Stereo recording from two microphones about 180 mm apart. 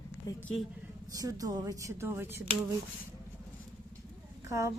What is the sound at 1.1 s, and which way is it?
Speech, 20° right (ahead or behind).